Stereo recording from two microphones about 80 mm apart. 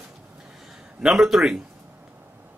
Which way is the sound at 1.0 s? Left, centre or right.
Centre.